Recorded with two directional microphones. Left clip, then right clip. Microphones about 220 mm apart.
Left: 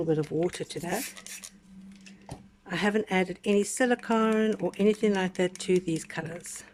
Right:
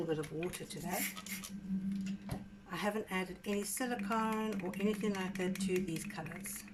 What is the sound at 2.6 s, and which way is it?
Speech, 40° left (ahead or behind).